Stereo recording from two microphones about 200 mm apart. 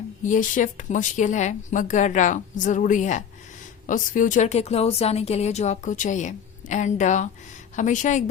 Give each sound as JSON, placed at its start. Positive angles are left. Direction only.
{"t": 0.2, "sound": "speech", "side_deg": 40}